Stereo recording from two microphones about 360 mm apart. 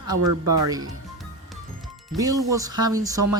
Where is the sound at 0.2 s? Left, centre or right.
Right.